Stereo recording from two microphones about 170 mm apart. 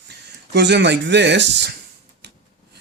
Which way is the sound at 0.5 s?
90° right.